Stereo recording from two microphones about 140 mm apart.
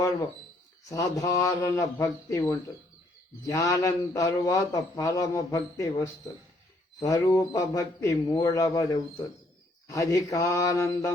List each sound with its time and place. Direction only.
0.9 s a man's voice: 25° left (ahead or behind)
3.4 s a man's voice: 25° left (ahead or behind)